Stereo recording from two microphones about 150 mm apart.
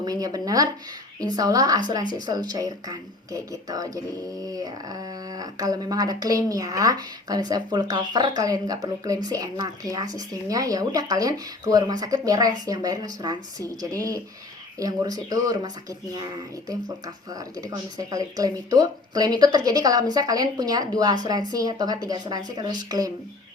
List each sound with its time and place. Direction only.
0.0 s speech: 25° right (ahead or behind)
17.2 s speech: 25° right (ahead or behind)